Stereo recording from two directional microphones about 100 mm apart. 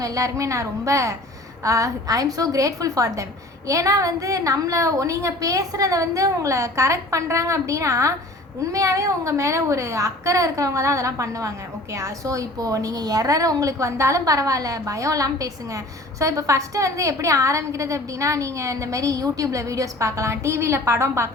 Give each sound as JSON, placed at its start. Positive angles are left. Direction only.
{"t": 0.0, "sound": "a woman's voice", "side_deg": -35}